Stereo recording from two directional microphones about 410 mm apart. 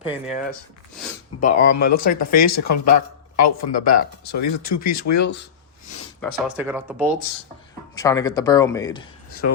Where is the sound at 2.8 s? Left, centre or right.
Left.